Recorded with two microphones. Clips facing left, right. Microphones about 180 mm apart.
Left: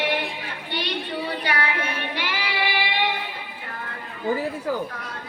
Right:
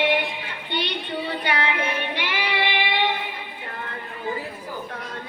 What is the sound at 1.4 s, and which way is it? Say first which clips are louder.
Child singing: right 1 dB; 20° right (ahead or behind).